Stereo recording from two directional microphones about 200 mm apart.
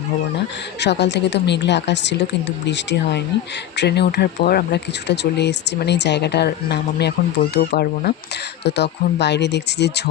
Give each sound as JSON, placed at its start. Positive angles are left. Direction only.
{"t": 0.8, "sound": "speech", "side_deg": 60}